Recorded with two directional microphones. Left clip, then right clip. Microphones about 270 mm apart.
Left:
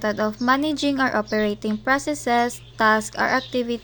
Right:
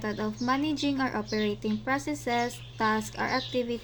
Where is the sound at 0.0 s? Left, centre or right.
Left.